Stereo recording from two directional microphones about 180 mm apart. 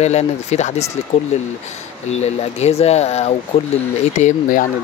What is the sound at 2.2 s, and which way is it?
Speech, 35° left (ahead or behind).